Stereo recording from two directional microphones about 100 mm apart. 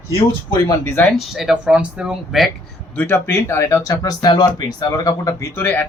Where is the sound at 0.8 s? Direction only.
25° left (ahead or behind).